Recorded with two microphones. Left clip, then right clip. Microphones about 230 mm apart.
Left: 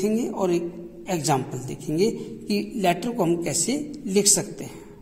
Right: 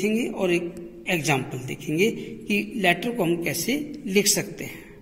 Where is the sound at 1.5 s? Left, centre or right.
Left.